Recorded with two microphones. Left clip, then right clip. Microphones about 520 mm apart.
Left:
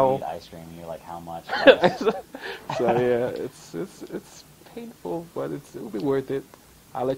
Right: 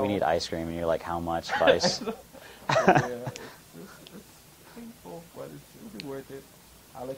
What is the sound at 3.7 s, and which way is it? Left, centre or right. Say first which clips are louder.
Speech: left 13 dB; left.